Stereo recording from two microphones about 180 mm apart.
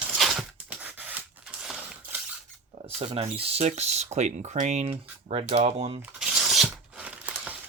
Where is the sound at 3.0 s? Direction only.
35° right (ahead or behind).